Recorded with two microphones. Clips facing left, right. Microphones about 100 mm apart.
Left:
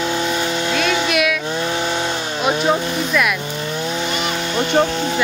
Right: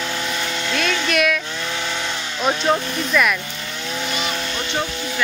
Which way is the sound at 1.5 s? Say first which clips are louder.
Left 6 dB; 30° left (ahead or behind).